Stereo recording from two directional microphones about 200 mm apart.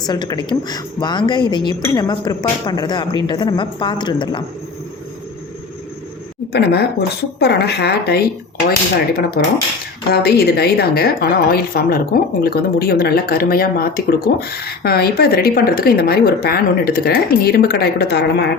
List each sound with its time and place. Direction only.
0.0 s a woman's voice: 20° left (ahead or behind)
6.5 s a woman's voice: 55° left (ahead or behind)
9.4 s a woman's voice: 50° left (ahead or behind)